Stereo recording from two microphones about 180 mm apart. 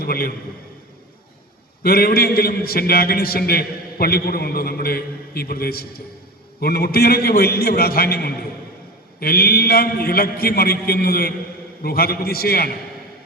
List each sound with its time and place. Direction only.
0.0 s a man's voice: 55° left (ahead or behind)
1.8 s a man's voice: 55° left (ahead or behind)